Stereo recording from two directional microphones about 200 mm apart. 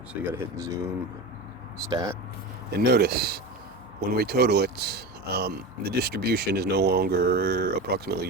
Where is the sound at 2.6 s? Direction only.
50° right (ahead or behind).